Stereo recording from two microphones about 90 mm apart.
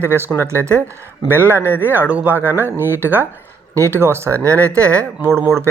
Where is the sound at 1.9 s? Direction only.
15° right (ahead or behind).